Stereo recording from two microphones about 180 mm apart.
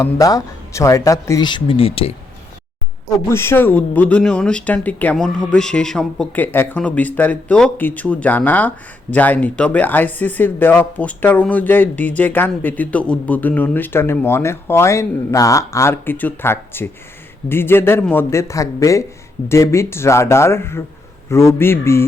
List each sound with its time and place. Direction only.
0.0 s a man's voice: 20° left (ahead or behind)
3.2 s speech: 15° left (ahead or behind)